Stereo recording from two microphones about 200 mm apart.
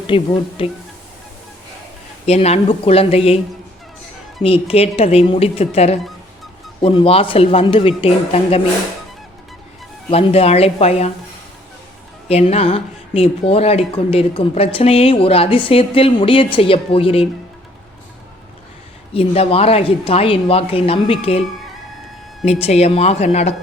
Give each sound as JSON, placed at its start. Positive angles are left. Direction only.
{"t": 0.1, "sound": "speech", "side_deg": 30}
{"t": 2.2, "sound": "speech", "side_deg": 30}
{"t": 4.4, "sound": "speech", "side_deg": 30}
{"t": 10.1, "sound": "speech", "side_deg": 30}
{"t": 12.3, "sound": "speech", "side_deg": 30}
{"t": 19.1, "sound": "speech", "side_deg": 30}
{"t": 22.6, "sound": "speech", "side_deg": 30}